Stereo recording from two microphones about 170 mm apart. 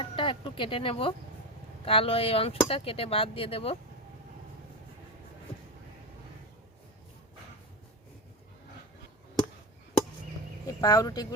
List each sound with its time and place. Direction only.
0.0 s speech: 30° left (ahead or behind)
10.7 s speech: 20° left (ahead or behind)